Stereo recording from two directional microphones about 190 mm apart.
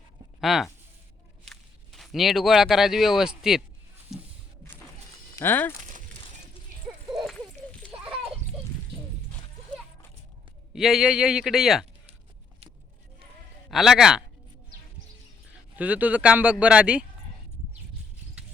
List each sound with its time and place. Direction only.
0.4 s a man's voice: centre (ahead or behind)
4.1 s a sound: centre (ahead or behind)
5.4 s speech: 10° left (ahead or behind)
10.8 s a man's voice: centre (ahead or behind)
13.7 s a man's voice: centre (ahead or behind)
15.7 s speech: 10° right (ahead or behind)